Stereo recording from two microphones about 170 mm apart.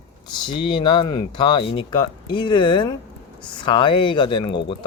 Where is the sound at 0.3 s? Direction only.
30° left (ahead or behind).